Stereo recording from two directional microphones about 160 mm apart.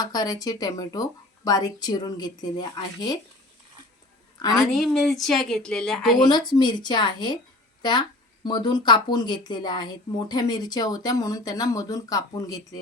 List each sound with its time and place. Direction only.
0.0 s speech: 25° left (ahead or behind)
4.4 s a woman's voice: 25° left (ahead or behind)
4.6 s speech: centre (ahead or behind)
6.2 s speech: 25° left (ahead or behind)